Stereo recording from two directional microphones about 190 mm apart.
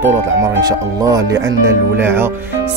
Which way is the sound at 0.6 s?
20° right (ahead or behind).